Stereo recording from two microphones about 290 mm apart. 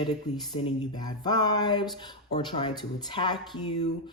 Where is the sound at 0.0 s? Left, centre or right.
Centre.